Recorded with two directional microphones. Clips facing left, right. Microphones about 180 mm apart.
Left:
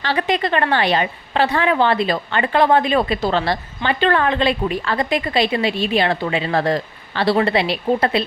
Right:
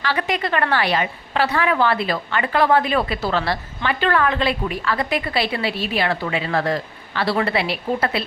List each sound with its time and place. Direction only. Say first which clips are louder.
0.0 s a woman's voice: left 3 dB; 30° left (ahead or behind)